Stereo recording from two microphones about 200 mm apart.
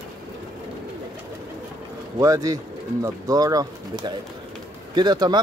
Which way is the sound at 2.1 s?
15° right (ahead or behind).